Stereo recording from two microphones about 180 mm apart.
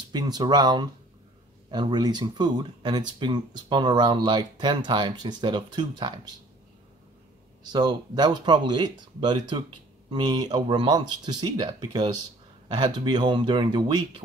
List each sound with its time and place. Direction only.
0.1 s speech: 20° right (ahead or behind)
7.6 s speech: 25° right (ahead or behind)